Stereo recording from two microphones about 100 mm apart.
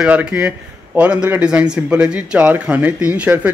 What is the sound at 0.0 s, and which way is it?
Speech, 10° right (ahead or behind).